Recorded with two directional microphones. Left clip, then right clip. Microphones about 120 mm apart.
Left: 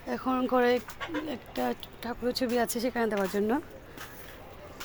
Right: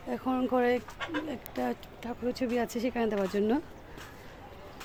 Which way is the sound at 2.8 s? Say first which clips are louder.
Left 1 dB; 15° right (ahead or behind).